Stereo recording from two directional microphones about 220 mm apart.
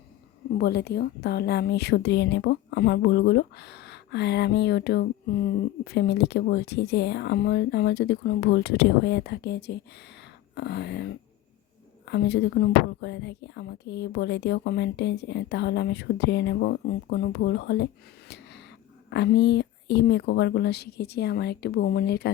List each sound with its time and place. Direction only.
0.6 s a woman's voice: 45° left (ahead or behind)
18.3 s a sound: 50° left (ahead or behind)
19.1 s a woman's voice: 50° left (ahead or behind)